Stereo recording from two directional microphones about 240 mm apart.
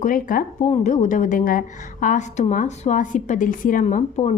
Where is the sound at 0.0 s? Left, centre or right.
Left.